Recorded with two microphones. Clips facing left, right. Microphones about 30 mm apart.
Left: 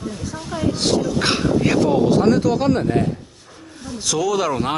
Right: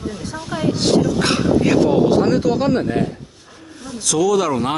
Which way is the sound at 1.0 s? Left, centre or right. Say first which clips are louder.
Right 2 dB; centre.